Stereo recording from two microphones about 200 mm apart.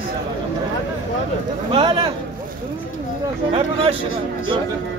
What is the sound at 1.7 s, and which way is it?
Speech, 25° right (ahead or behind).